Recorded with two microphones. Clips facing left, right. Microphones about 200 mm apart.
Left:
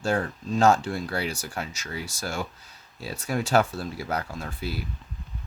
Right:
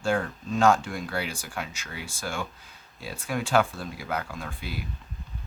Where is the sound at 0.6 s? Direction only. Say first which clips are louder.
Left 1 dB; 40° left (ahead or behind).